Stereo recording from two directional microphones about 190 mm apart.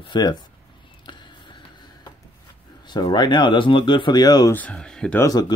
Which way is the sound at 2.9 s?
25° left (ahead or behind).